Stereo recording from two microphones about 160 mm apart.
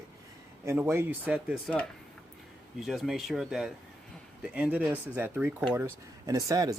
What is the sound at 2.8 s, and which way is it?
Speech, centre (ahead or behind).